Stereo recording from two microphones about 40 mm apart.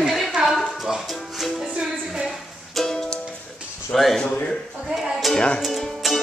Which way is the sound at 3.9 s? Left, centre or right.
Centre.